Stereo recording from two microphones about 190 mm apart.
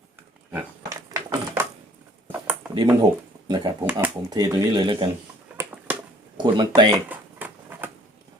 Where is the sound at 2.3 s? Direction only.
5° right (ahead or behind).